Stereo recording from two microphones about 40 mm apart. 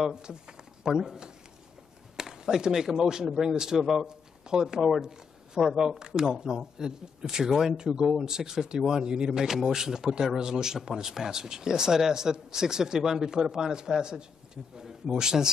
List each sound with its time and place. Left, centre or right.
0.1 s speech: centre